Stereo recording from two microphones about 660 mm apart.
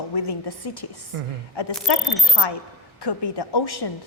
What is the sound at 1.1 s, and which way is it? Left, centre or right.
Speech, right.